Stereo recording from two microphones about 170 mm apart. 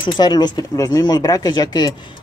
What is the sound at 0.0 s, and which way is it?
Speech, 25° left (ahead or behind).